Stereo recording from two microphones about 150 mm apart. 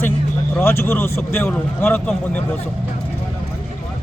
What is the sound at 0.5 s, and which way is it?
Speech, 15° left (ahead or behind).